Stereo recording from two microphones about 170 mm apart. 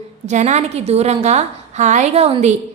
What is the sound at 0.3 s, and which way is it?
A woman's voice, 45° right (ahead or behind).